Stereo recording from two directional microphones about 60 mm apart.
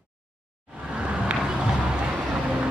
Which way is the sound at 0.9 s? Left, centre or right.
Centre.